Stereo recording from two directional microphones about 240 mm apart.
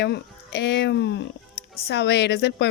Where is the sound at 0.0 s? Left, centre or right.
Left.